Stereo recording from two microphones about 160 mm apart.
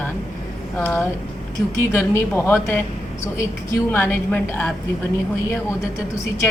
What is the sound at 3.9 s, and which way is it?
Speech, 15° left (ahead or behind).